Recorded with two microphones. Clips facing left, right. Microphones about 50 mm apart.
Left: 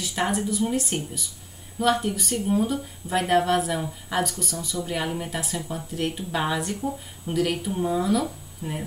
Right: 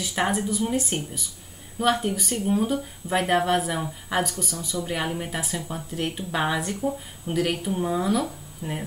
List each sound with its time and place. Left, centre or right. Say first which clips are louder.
0.1 s speech: even; centre